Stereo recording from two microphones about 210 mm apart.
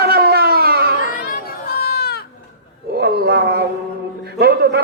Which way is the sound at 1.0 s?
40° left (ahead or behind).